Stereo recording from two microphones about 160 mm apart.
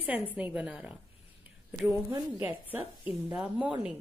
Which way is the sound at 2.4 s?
10° right (ahead or behind).